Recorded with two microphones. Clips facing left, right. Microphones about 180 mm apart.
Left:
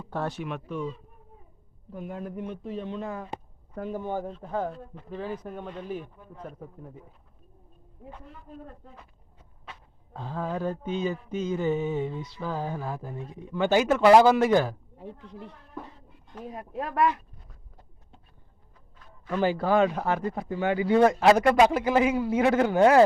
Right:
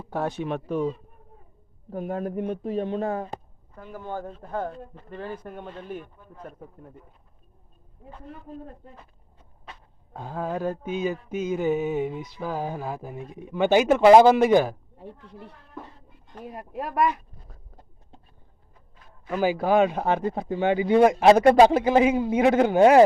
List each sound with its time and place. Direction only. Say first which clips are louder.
0.1 s mantra: right 3 dB; 15° right (ahead or behind)
0.4 s speech: right 6 dB; 35° right (ahead or behind)
3.9 s speech: left 1 dB; 15° left (ahead or behind)
4.3 s speech: even; 5° right (ahead or behind)
10.1 s mantra: right 2 dB; 15° right (ahead or behind)
14.9 s speech: left 1 dB; 5° right (ahead or behind)
16.4 s mantra: right 1 dB; 10° right (ahead or behind)
19.3 s speech: right 2 dB; 10° right (ahead or behind)